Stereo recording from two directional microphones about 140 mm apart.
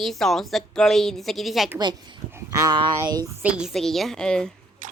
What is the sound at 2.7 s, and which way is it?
Speech, 30° right (ahead or behind).